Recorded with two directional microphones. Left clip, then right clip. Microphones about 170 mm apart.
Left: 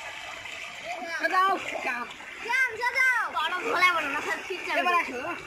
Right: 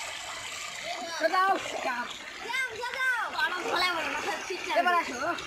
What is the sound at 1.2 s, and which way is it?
Speech, 30° right (ahead or behind).